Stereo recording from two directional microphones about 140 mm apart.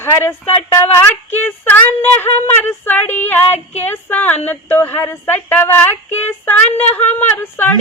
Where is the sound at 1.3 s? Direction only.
15° left (ahead or behind).